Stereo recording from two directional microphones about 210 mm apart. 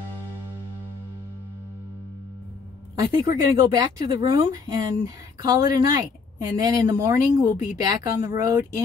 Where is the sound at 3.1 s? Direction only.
20° right (ahead or behind).